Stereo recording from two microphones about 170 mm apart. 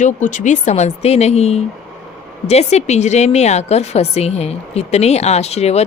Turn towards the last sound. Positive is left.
turn(degrees=40)  # may be behind; listen again after turning